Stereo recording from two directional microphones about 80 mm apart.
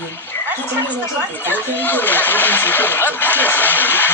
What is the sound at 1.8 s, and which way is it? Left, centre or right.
Speech, left.